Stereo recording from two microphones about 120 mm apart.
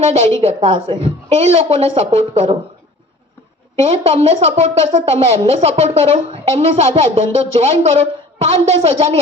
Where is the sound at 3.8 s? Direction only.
60° right (ahead or behind).